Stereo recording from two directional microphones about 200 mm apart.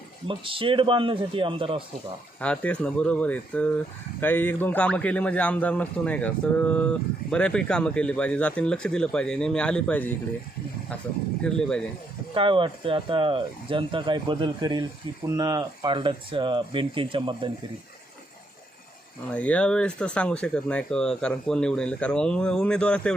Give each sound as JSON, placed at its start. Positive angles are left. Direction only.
{"t": 0.3, "sound": "speech", "side_deg": -25}
{"t": 2.4, "sound": "a man's voice", "side_deg": 5}
{"t": 11.4, "sound": "speech", "side_deg": 5}
{"t": 12.3, "sound": "speech", "side_deg": -25}
{"t": 19.3, "sound": "speech", "side_deg": 5}